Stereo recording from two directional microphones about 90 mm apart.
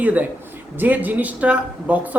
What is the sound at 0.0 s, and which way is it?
A woman's voice, 15° right (ahead or behind).